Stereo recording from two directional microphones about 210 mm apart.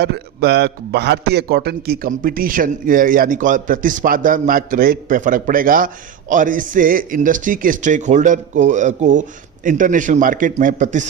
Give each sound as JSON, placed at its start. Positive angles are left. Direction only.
{"t": 0.0, "sound": "a man's voice", "side_deg": -50}